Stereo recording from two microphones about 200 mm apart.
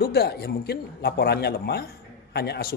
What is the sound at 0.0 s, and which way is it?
Speech, 55° left (ahead or behind).